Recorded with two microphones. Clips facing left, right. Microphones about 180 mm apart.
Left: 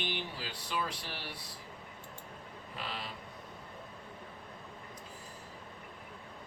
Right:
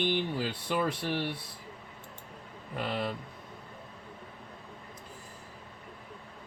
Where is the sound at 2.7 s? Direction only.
55° right (ahead or behind).